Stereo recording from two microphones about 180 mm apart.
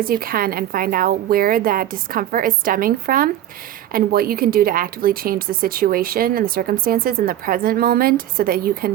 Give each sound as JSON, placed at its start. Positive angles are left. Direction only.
{"t": 0.0, "sound": "a woman's voice", "side_deg": -55}